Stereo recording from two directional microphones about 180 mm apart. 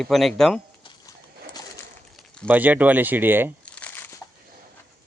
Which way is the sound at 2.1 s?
5° left (ahead or behind).